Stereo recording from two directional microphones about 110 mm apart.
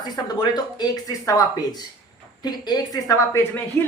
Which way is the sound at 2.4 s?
40° left (ahead or behind).